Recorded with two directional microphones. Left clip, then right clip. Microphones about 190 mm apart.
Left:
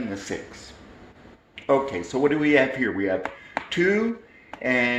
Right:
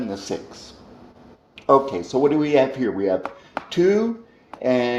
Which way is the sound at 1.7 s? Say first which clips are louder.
Right 5 dB; 45° right (ahead or behind).